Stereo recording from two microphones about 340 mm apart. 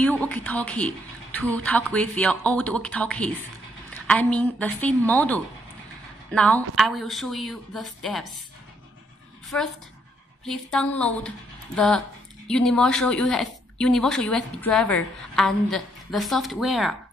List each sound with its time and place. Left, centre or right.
0.0 s a woman's voice: centre
9.5 s a woman's voice: centre